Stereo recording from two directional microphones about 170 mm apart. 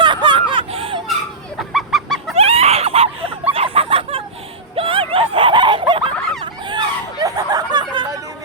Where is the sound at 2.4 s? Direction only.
35° right (ahead or behind).